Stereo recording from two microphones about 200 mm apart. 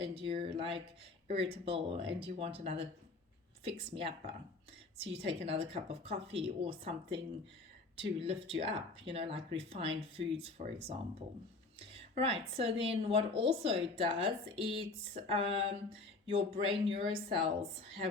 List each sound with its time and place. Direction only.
0.0 s speech: 30° right (ahead or behind)
8.2 s speech: 30° right (ahead or behind)
12.2 s speech: 30° right (ahead or behind)